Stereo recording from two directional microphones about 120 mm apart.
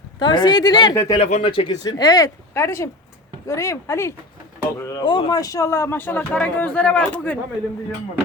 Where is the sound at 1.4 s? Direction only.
50° left (ahead or behind).